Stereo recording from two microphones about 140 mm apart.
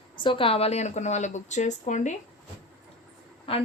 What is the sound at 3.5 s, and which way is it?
Speech, 40° left (ahead or behind).